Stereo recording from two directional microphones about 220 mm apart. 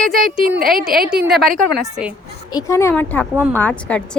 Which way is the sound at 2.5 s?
15° left (ahead or behind).